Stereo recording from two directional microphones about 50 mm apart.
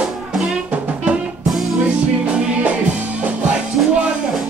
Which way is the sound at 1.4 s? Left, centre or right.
Centre.